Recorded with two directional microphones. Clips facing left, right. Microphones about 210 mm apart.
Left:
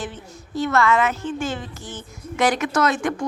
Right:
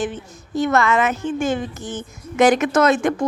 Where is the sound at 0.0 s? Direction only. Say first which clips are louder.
Right 7 dB; 15° right (ahead or behind).